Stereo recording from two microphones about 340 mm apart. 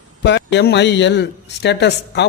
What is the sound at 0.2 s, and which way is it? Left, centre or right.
Speech, left.